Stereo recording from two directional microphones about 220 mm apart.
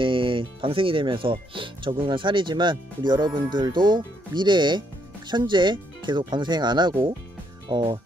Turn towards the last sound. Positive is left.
turn(degrees=-20)  # may be behind; listen again after turning